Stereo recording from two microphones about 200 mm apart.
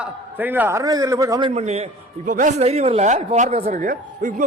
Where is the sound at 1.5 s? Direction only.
30° right (ahead or behind).